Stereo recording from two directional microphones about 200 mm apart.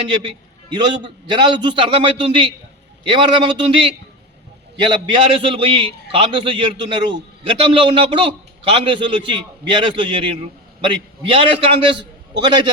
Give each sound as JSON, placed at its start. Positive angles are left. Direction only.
{"t": 0.1, "sound": "a man's voice", "side_deg": -25}